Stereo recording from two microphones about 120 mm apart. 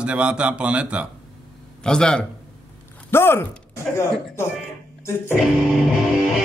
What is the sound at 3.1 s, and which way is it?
Speech, 20° left (ahead or behind).